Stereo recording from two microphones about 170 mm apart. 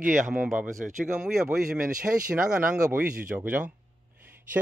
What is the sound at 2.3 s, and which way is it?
Speech, 5° right (ahead or behind).